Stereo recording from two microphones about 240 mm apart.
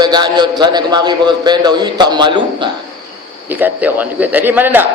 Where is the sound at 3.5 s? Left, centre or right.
Centre.